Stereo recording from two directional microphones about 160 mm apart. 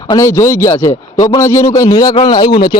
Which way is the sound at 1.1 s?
30° left (ahead or behind).